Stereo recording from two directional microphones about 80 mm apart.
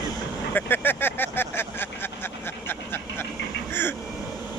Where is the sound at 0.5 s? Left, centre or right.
Left.